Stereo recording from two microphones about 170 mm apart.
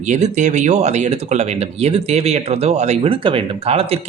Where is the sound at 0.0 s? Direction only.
45° right (ahead or behind).